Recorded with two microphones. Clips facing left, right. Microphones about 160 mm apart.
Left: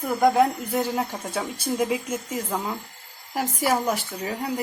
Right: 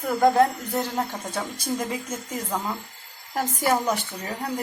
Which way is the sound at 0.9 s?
5° left (ahead or behind).